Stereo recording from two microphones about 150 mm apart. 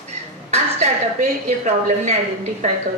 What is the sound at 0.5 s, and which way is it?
A woman's voice, 50° right (ahead or behind).